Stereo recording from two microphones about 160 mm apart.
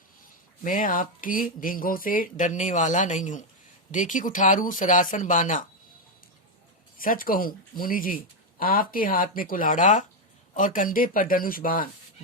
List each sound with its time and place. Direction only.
0.6 s speech: 55° left (ahead or behind)
7.0 s speech: 60° left (ahead or behind)